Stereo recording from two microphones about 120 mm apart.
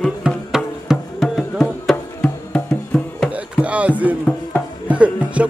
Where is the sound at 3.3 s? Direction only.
10° right (ahead or behind).